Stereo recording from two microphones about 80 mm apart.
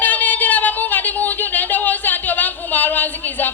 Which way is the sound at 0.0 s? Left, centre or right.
Left.